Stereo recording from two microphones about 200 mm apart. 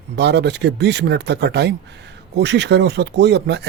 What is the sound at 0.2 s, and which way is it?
Speech, 60° right (ahead or behind).